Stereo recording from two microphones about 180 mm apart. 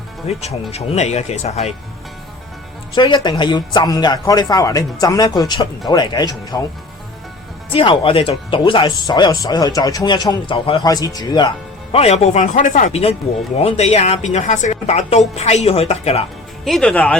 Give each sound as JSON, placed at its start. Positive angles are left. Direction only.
{"t": 0.3, "sound": "a woman's voice", "side_deg": 35}
{"t": 2.9, "sound": "speech", "side_deg": 25}
{"t": 7.7, "sound": "a woman's voice", "side_deg": 30}
{"t": 16.6, "sound": "speech", "side_deg": 5}